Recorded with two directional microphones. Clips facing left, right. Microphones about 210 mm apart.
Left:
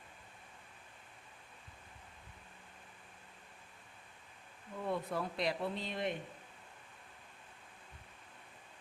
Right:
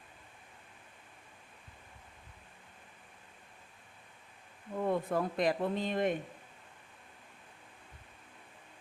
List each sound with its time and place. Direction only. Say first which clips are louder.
4.8 s speech: right 6 dB; 50° right (ahead or behind)